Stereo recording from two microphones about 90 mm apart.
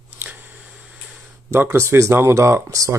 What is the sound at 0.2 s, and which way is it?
Scissors, 20° right (ahead or behind).